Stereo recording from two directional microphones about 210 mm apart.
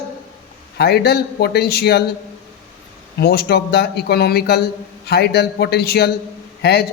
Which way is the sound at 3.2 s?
50° left (ahead or behind).